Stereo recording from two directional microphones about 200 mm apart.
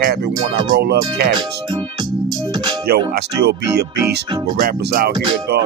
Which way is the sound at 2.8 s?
55° right (ahead or behind).